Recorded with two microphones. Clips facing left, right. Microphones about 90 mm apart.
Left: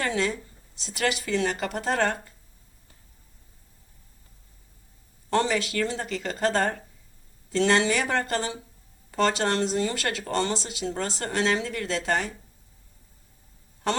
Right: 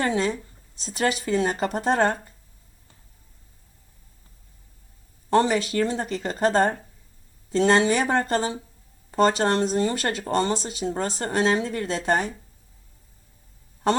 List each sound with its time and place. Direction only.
0.0 s speech: 30° right (ahead or behind)
5.3 s speech: 35° right (ahead or behind)